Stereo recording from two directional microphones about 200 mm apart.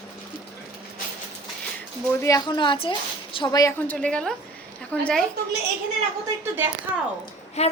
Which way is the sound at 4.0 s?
5° left (ahead or behind).